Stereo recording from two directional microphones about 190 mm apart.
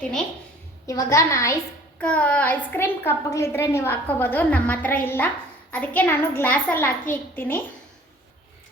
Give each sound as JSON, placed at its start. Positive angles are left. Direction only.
{"t": 0.9, "sound": "a child's voice", "side_deg": 15}